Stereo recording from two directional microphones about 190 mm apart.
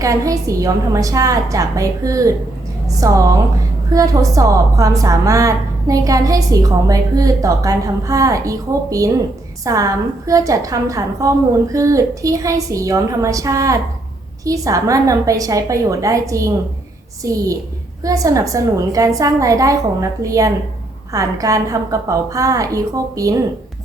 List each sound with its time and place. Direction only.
0.0 s a woman's voice: 15° right (ahead or behind)